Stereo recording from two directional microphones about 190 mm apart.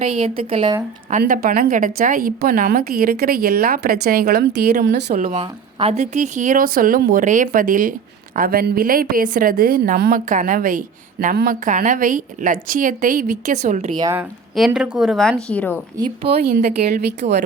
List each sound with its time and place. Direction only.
0.0 s a woman's voice: 30° right (ahead or behind)
1.2 s a woman's voice: 50° right (ahead or behind)
5.1 s a woman's voice: 35° right (ahead or behind)
14.0 s speech: 15° right (ahead or behind)
14.5 s a woman's voice: 5° right (ahead or behind)
16.2 s a woman's voice: 55° right (ahead or behind)